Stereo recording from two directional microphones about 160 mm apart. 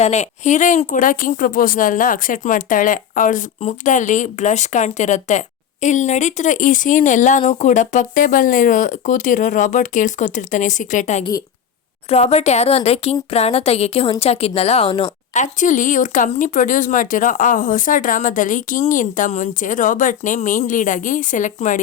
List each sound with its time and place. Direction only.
0.0 s a woman's voice: 45° left (ahead or behind)
15.3 s a woman's voice: 50° left (ahead or behind)